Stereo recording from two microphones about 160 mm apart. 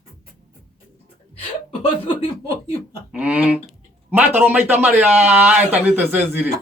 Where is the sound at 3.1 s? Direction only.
5° right (ahead or behind).